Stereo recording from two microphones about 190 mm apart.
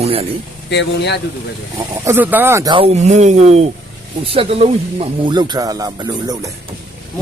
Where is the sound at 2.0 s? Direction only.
10° right (ahead or behind).